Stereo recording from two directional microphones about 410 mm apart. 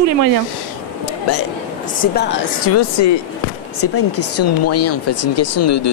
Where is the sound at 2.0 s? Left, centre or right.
Left.